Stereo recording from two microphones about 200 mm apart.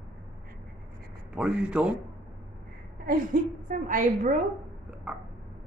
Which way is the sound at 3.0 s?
45° right (ahead or behind).